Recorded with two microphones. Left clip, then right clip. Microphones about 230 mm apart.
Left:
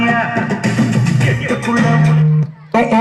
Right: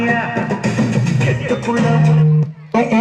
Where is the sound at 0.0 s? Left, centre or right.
Left.